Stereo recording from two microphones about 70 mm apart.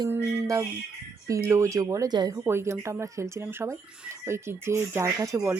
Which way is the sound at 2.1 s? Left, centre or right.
Right.